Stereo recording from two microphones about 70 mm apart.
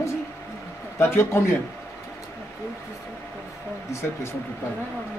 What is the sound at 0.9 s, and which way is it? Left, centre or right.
Speech, left.